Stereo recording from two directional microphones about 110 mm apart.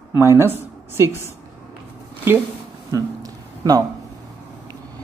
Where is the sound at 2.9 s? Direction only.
30° right (ahead or behind).